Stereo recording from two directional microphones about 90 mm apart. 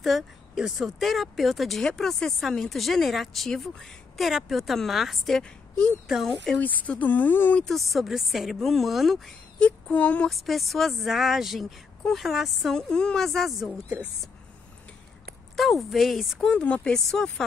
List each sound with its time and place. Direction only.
0.0 s speech: centre (ahead or behind)
6.6 s speech: 20° left (ahead or behind)
7.6 s speech: centre (ahead or behind)
9.7 s child singing: 15° left (ahead or behind)
10.3 s speech: centre (ahead or behind)
15.5 s speech: centre (ahead or behind)